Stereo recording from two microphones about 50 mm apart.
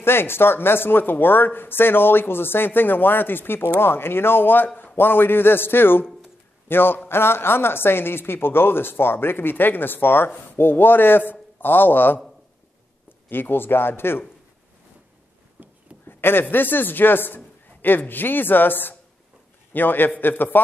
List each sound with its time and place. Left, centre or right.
0.0 s a man's voice: left
13.3 s speech: left
16.1 s a woman's voice: left